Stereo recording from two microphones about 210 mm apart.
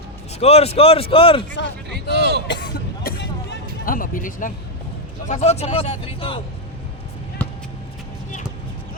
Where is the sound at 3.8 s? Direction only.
40° left (ahead or behind); by 6.4 s 25° left (ahead or behind).